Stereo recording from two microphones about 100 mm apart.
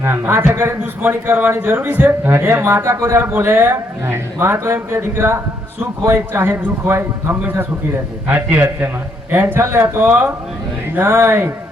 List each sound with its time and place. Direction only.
0.0 s a man's voice: 25° right (ahead or behind)